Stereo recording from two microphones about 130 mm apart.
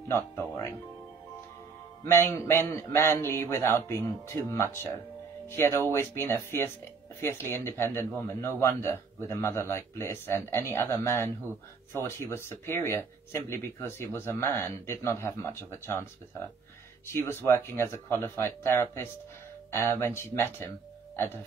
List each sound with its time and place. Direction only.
2.0 s speech: 20° left (ahead or behind)